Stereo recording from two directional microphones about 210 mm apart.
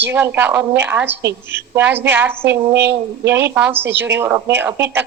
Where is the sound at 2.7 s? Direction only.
55° right (ahead or behind).